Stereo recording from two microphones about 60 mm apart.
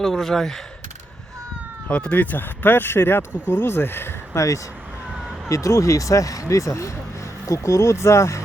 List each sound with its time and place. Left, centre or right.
0.0 s speech: centre
1.9 s speech: left
4.4 s speech: left